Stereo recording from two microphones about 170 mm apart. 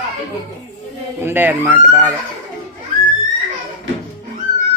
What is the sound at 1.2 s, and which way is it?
Speech, 10° right (ahead or behind).